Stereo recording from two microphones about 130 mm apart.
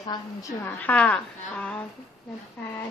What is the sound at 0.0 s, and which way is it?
A woman's voice, 30° left (ahead or behind).